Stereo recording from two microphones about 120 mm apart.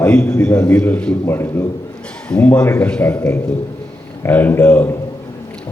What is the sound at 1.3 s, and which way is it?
Speech, 20° left (ahead or behind).